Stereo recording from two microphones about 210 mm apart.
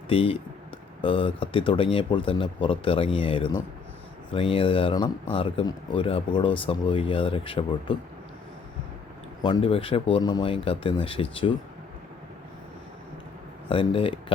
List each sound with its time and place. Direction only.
0.1 s speech: 25° left (ahead or behind)
9.4 s speech: 25° left (ahead or behind)
13.7 s speech: 25° left (ahead or behind)